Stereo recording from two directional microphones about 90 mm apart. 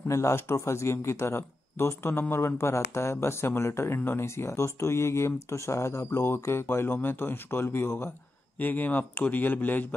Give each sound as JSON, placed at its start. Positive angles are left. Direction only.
{"t": 0.1, "sound": "speech", "side_deg": 30}